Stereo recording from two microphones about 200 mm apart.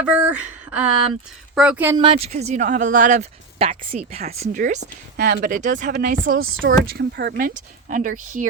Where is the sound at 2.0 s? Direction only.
25° right (ahead or behind); by 6.1 s 45° right (ahead or behind).